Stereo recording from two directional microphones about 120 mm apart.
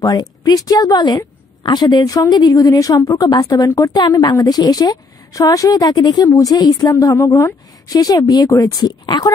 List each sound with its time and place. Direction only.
0.0 s a woman's voice: 35° left (ahead or behind)